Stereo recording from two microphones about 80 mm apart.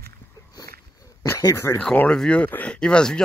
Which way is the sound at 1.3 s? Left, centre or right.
Left.